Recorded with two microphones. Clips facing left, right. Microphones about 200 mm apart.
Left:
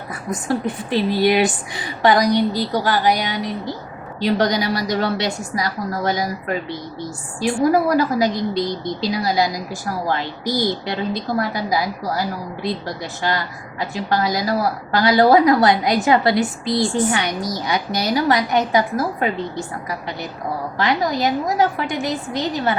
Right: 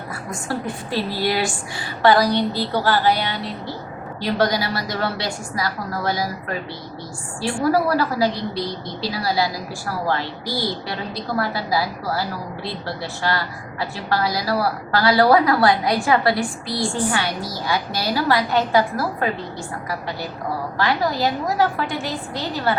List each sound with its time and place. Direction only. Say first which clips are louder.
0.3 s a woman's voice: left 5 dB; 20° left (ahead or behind)
7.4 s a woman's voice: left 3 dB; 20° left (ahead or behind)
13.2 s a woman's voice: left 1 dB; 20° left (ahead or behind)